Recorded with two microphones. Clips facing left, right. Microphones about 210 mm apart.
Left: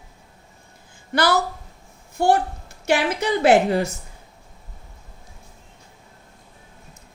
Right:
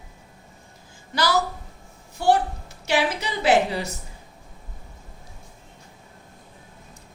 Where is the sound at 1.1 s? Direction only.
55° left (ahead or behind).